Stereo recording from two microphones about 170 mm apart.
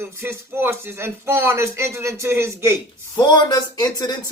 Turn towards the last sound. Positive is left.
turn(degrees=25)  # may be behind; listen again after turning